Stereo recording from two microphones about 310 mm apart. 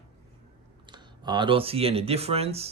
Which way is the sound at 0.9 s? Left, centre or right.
Centre.